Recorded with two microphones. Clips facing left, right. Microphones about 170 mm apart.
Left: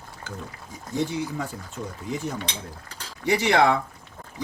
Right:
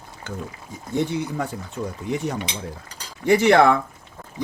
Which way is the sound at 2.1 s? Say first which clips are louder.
Right 4 dB; 65° right (ahead or behind).